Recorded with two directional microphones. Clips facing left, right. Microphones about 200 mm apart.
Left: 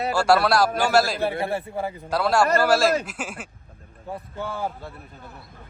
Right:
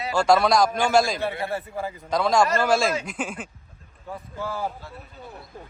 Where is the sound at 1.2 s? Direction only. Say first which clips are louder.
Left 3 dB; 30° left (ahead or behind).